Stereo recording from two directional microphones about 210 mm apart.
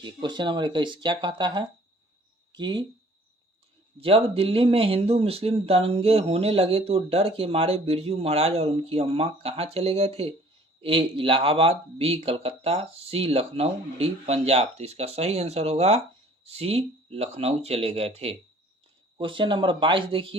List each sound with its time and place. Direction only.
0.0 s speech: 20° right (ahead or behind)
4.0 s speech: 25° right (ahead or behind)
19.1 s speech: 25° right (ahead or behind)